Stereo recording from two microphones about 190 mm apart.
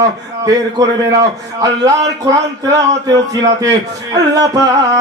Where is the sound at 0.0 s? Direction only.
20° right (ahead or behind).